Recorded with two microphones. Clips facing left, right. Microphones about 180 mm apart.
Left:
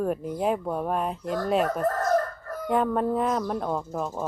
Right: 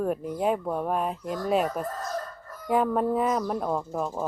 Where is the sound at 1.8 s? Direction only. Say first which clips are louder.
Left 9 dB; 65° left (ahead or behind).